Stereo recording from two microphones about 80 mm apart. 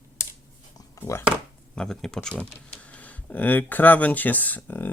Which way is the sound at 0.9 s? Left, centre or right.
Left.